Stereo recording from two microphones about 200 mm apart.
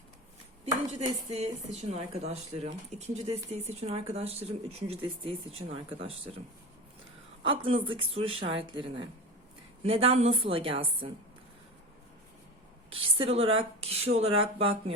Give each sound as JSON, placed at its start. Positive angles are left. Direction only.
{"t": 1.0, "sound": "speech", "side_deg": -30}
{"t": 7.4, "sound": "speech", "side_deg": -25}
{"t": 12.9, "sound": "speech", "side_deg": -25}